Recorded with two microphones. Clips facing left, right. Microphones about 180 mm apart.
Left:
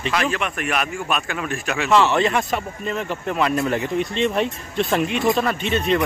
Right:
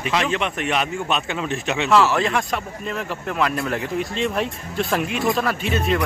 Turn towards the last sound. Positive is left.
turn(degrees=-5)  # may be behind; listen again after turning